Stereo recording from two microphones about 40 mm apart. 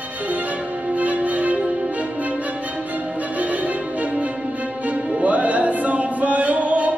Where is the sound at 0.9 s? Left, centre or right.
Right.